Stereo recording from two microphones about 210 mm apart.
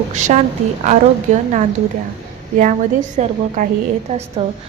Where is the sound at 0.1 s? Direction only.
35° right (ahead or behind).